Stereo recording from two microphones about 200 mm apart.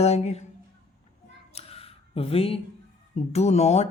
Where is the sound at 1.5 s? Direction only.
30° left (ahead or behind).